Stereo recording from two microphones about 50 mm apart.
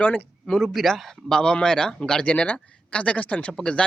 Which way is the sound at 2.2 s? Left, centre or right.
Left.